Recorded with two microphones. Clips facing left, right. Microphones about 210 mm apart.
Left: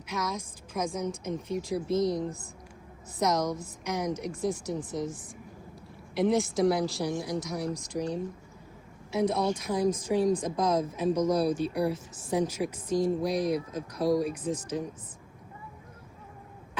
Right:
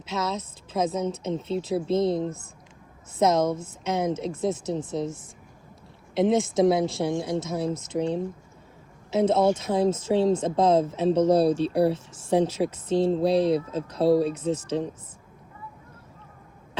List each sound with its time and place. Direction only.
0.0 s speech: 25° right (ahead or behind)
6.1 s speech: 20° right (ahead or behind)